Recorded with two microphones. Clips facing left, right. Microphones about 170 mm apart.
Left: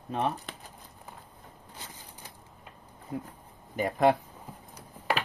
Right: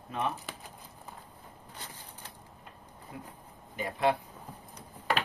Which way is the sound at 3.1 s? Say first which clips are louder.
Left 9 dB; 45° left (ahead or behind).